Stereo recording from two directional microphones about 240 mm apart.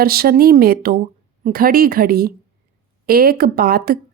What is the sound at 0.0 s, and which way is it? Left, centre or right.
Speech, right.